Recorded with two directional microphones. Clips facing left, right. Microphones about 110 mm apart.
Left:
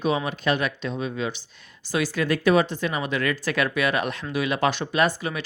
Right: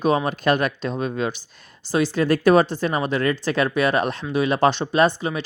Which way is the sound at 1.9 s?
30° right (ahead or behind).